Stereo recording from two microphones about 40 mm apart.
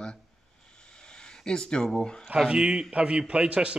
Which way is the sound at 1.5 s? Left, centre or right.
Left.